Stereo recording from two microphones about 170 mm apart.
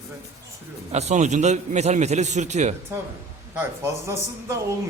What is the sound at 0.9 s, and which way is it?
A man's voice, 40° right (ahead or behind).